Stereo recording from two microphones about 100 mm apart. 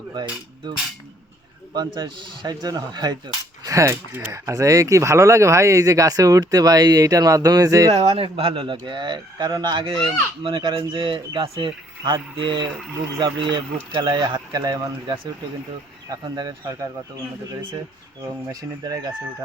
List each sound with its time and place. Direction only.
0.1 s cutlery: 45° right (ahead or behind)
1.7 s speech: 45° right (ahead or behind)
3.6 s speech: 35° right (ahead or behind)
7.9 s speech: 90° right; by 16.7 s 45° right (ahead or behind)